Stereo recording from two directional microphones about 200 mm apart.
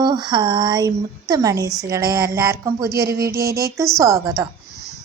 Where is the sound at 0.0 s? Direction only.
20° right (ahead or behind).